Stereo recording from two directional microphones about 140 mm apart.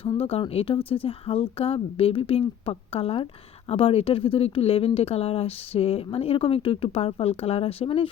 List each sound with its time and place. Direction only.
0.2 s speech: 45° left (ahead or behind)